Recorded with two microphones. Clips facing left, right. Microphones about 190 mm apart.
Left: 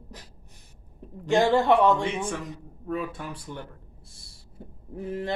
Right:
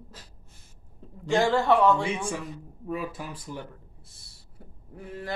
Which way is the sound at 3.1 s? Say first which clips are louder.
Even; 5° right (ahead or behind).